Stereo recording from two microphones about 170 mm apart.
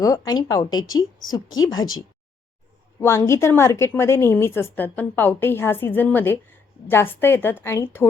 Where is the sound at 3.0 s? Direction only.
15° left (ahead or behind).